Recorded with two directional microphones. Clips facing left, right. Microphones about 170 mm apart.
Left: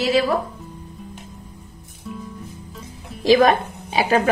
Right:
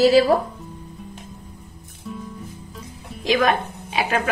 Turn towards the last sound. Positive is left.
turn(degrees=35)  # may be behind; listen again after turning